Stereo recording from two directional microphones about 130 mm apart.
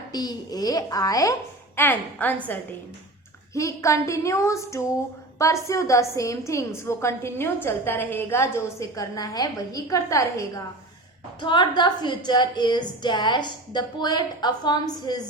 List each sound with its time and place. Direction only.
0.1 s a woman's voice: 30° left (ahead or behind)
1.8 s a woman's voice: 15° left (ahead or behind)
3.5 s a woman's voice: 25° left (ahead or behind)
11.3 s a woman's voice: 35° left (ahead or behind)